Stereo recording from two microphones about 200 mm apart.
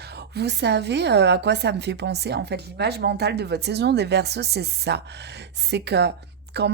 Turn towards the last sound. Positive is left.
turn(degrees=-55)  # may be behind; listen again after turning